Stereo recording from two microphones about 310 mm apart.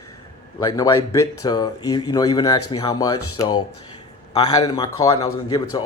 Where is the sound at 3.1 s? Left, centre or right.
Left.